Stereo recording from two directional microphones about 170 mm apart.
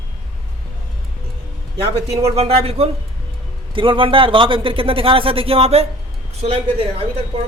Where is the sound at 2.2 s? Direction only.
40° right (ahead or behind).